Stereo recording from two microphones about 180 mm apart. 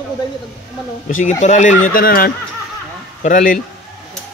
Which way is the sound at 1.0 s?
45° left (ahead or behind).